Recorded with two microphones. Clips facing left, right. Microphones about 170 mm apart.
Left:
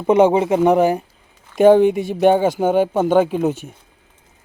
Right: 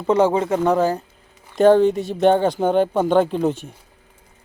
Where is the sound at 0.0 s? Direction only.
20° left (ahead or behind).